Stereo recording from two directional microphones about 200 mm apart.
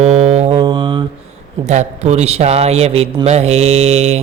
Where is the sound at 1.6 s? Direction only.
35° right (ahead or behind).